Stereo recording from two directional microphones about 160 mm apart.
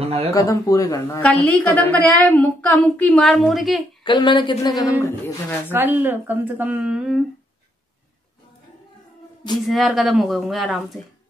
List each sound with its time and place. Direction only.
0.0 s speech: 40° right (ahead or behind)
0.3 s a woman's voice: 20° left (ahead or behind)
1.2 s a woman's voice: 10° left (ahead or behind)
4.0 s a woman's voice: 30° left (ahead or behind)
5.7 s speech: 10° right (ahead or behind)
9.7 s a woman's voice: centre (ahead or behind)